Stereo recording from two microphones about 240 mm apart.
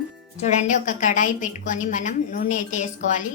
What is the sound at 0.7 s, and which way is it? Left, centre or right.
A woman's voice, left.